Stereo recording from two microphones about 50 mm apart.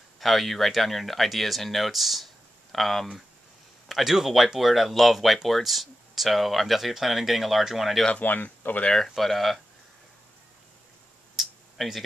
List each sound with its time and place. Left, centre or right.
0.2 s speech: centre
8.1 s speech: left
8.9 s speech: centre
11.3 s a sound: centre